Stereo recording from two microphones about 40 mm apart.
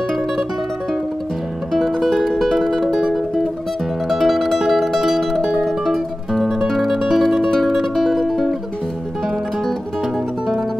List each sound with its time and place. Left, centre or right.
1.9 s music: centre
2.9 s music: centre
4.1 s music: centre
6.3 s guitar: centre
6.7 s music: centre